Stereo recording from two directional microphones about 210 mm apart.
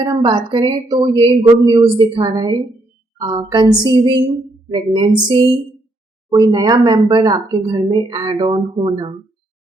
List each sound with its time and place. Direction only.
0.0 s speech: 20° right (ahead or behind)
6.3 s speech: 20° right (ahead or behind)